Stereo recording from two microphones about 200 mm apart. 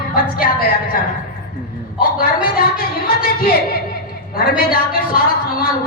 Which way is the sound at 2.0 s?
45° left (ahead or behind).